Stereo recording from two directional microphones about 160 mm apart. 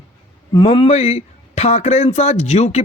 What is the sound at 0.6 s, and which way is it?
Speech, 40° left (ahead or behind).